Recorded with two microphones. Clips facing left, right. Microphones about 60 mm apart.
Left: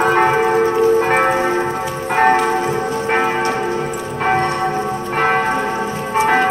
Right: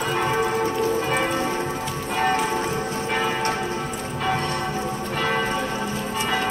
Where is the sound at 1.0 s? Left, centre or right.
Left.